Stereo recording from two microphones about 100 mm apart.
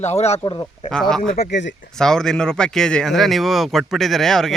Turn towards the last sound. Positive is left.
turn(degrees=5)  # may be behind; listen again after turning